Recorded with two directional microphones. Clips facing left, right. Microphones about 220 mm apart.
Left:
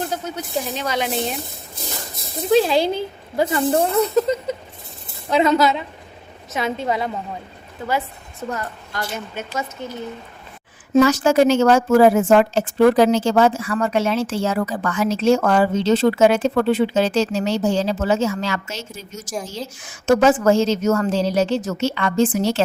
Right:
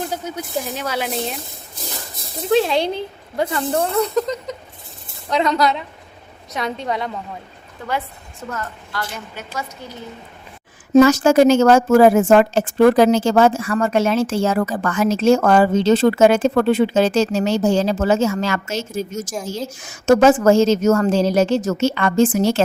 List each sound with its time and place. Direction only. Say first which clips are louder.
0.1 s speech: even; 10° right (ahead or behind)
2.5 s speech: left 1 dB; centre (ahead or behind)
5.3 s speech: left 2 dB; 5° left (ahead or behind)
8.4 s a woman's voice: left 1 dB; 20° left (ahead or behind)
10.9 s a woman's voice: right 3 dB; 45° right (ahead or behind)